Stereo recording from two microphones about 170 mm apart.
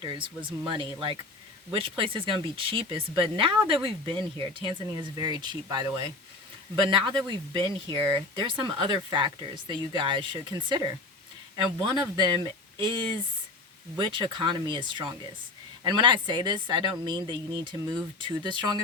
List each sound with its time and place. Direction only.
0.0 s speech: 30° right (ahead or behind)
11.5 s speech: 25° right (ahead or behind)